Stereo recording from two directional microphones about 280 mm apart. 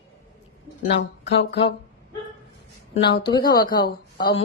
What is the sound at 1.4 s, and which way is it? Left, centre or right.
Speech, left.